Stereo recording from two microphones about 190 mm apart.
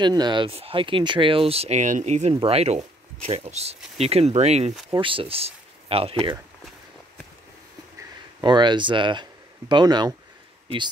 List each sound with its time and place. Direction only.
0.0 s speech: 20° right (ahead or behind)
8.4 s speech: 25° right (ahead or behind)